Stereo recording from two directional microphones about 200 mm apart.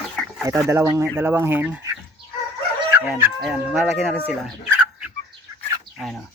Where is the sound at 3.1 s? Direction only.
Centre (ahead or behind).